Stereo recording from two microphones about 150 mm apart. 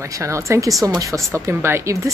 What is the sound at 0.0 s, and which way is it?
A woman's voice, 20° right (ahead or behind).